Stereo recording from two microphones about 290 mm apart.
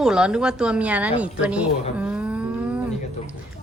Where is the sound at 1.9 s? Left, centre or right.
Centre.